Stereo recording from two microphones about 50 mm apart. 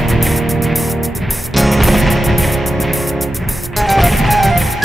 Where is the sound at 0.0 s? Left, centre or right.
Centre.